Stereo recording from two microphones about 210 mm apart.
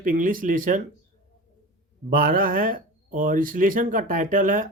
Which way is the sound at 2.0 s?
40° right (ahead or behind).